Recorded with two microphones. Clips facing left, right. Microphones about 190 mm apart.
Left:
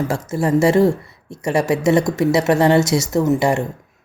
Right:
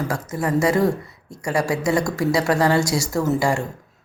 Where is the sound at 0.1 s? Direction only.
25° left (ahead or behind).